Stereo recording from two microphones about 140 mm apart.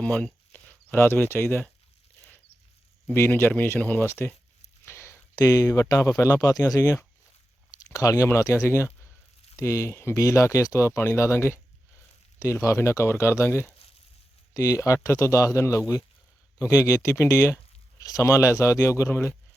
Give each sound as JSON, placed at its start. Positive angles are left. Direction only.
{"t": 0.0, "sound": "speech", "side_deg": 5}
{"t": 3.1, "sound": "speech", "side_deg": 15}
{"t": 4.9, "sound": "a sound", "side_deg": 20}
{"t": 5.4, "sound": "speech", "side_deg": 25}